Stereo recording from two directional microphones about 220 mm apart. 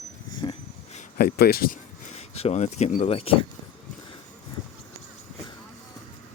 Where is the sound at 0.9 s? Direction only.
45° left (ahead or behind); by 3.3 s 25° left (ahead or behind).